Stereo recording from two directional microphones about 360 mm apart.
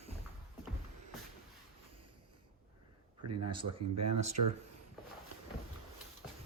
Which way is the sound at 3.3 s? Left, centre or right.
Right.